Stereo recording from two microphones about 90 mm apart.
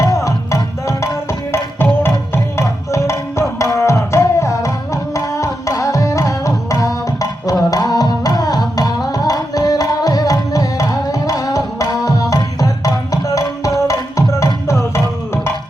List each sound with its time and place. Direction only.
0.0 s music: 35° left (ahead or behind)
5.1 s tabla: 35° left (ahead or behind)